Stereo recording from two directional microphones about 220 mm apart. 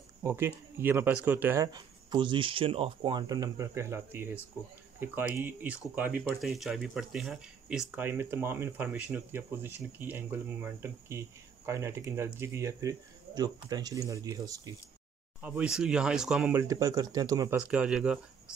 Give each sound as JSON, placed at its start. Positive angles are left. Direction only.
{"t": 0.2, "sound": "speech", "side_deg": -10}
{"t": 15.4, "sound": "speech", "side_deg": -5}
{"t": 16.6, "sound": "speech", "side_deg": -15}
{"t": 17.6, "sound": "speech", "side_deg": -5}